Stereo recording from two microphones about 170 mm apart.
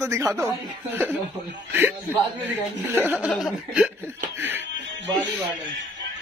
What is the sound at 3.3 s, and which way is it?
Speech, centre (ahead or behind).